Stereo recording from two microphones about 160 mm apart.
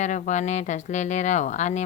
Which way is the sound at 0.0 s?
50° left (ahead or behind).